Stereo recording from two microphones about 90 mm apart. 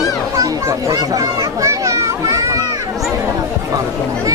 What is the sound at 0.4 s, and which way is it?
Children playing, 35° right (ahead or behind).